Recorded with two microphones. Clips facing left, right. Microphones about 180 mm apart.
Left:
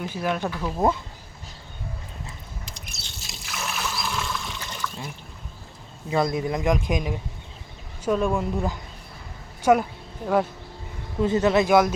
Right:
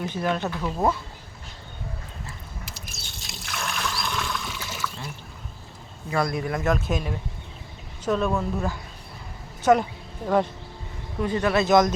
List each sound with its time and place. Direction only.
0.0 s speech: 5° left (ahead or behind)
2.6 s trickle: 5° right (ahead or behind)
6.1 s speech: 20° left (ahead or behind)
11.2 s speech: 20° left (ahead or behind)